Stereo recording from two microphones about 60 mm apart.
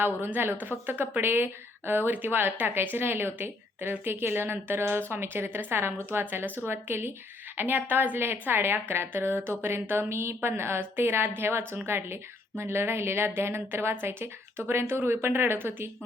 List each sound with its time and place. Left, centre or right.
0.0 s a woman's voice: right